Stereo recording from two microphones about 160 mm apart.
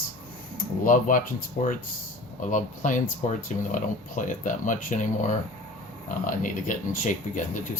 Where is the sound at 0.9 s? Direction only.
55° left (ahead or behind).